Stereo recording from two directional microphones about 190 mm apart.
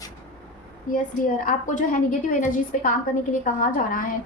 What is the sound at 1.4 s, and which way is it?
A woman's voice, 45° left (ahead or behind).